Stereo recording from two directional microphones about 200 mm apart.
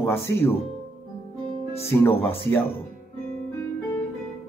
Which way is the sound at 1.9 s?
10° left (ahead or behind).